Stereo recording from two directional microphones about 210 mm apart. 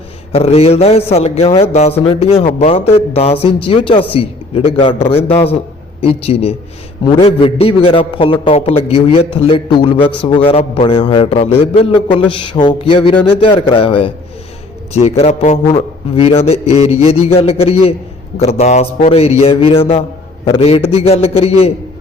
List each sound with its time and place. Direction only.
0.3 s speech: 30° left (ahead or behind)